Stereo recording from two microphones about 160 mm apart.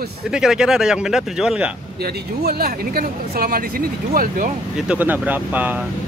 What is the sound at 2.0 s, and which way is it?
Speech, 75° right (ahead or behind).